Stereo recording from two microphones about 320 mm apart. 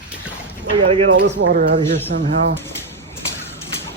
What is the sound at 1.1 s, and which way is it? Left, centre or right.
Speech, right.